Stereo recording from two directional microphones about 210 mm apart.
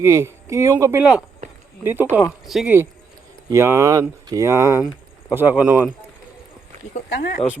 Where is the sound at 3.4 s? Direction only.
15° right (ahead or behind).